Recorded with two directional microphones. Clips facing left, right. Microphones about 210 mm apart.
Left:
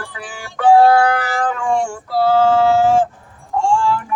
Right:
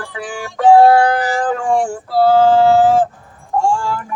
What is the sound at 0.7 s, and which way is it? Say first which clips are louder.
Cat: right 2 dB; 30° right (ahead or behind).